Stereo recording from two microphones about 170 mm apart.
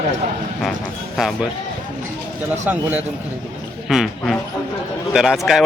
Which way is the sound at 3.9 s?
Centre (ahead or behind).